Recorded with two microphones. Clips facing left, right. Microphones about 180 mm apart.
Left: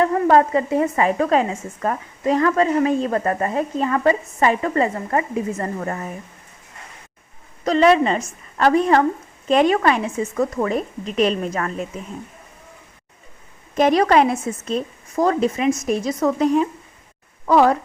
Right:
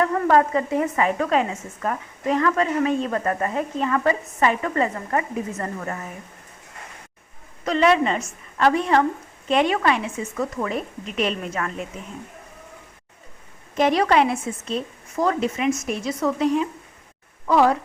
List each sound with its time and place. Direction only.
0.0 s a woman's voice: 30° left (ahead or behind)
7.6 s a woman's voice: 35° left (ahead or behind)
13.7 s a woman's voice: 45° left (ahead or behind)